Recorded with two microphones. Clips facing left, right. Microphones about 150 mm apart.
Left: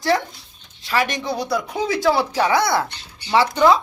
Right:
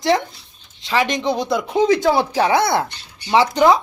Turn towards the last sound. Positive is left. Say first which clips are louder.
# right 2 dB
turn(degrees=-15)  # may be behind; listen again after turning